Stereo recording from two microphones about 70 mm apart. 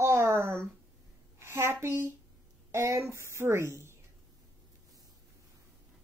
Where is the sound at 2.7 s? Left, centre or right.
Right.